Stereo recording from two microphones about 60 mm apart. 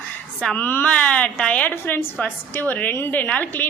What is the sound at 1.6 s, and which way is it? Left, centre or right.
A woman's voice, left.